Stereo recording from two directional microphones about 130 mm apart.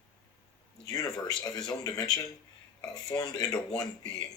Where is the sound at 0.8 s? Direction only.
30° left (ahead or behind).